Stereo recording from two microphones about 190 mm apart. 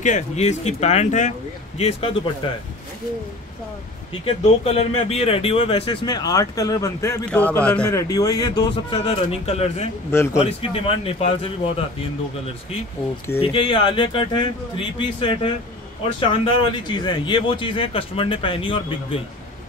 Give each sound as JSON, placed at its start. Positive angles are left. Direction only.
{"t": 0.0, "sound": "a man's voice", "side_deg": 40}
{"t": 4.3, "sound": "speech", "side_deg": 30}
{"t": 7.9, "sound": "a man's voice", "side_deg": 20}
{"t": 13.4, "sound": "speech", "side_deg": 30}